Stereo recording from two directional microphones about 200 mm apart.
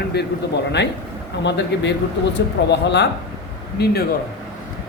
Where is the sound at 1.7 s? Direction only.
60° left (ahead or behind).